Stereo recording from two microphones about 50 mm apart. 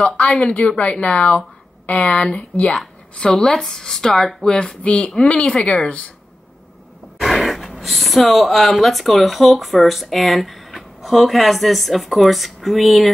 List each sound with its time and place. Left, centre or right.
0.0 s speech: left
7.2 s speech: centre